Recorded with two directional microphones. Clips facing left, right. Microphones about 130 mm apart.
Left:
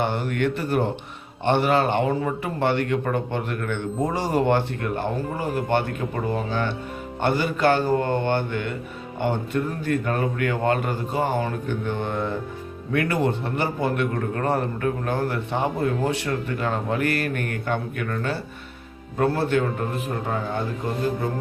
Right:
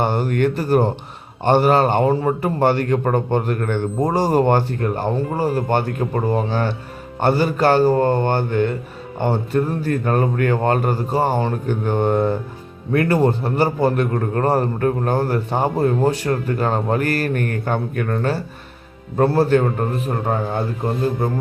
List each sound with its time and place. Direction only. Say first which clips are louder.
0.0 s a man's voice: right 5 dB; 40° right (ahead or behind)
11.7 s mantra: right 8 dB; 45° right (ahead or behind)
12.9 s a man's voice: right 6 dB; 40° right (ahead or behind)